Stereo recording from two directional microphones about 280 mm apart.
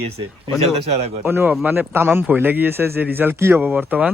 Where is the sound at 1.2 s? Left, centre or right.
Centre.